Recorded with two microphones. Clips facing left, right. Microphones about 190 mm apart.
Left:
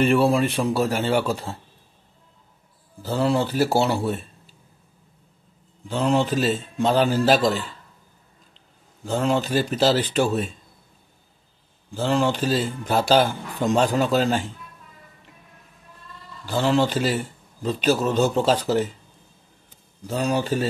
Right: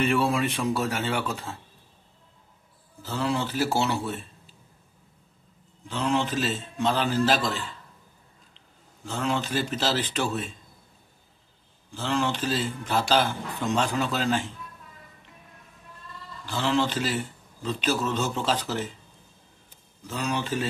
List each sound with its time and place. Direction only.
0.0 s speech: 35° left (ahead or behind)
3.1 s speech: 40° left (ahead or behind)
5.9 s a man's voice: 40° left (ahead or behind)
9.0 s a man's voice: 35° left (ahead or behind)
12.0 s a man's voice: 40° left (ahead or behind)
16.4 s a man's voice: 35° left (ahead or behind)
20.1 s speech: 40° left (ahead or behind)